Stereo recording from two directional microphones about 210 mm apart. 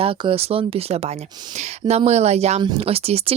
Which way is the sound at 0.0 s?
25° right (ahead or behind).